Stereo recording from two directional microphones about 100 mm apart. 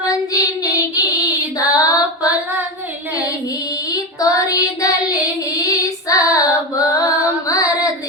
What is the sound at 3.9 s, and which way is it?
Child singing, 35° left (ahead or behind).